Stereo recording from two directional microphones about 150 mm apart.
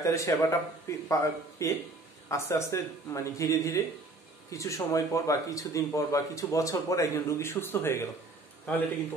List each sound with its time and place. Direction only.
0.0 s speech: 20° left (ahead or behind)